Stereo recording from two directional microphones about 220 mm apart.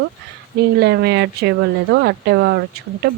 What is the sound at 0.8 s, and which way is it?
A woman's voice, 50° right (ahead or behind).